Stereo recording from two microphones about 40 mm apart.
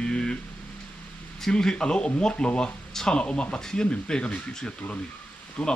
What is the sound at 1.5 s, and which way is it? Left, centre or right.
Speech, left.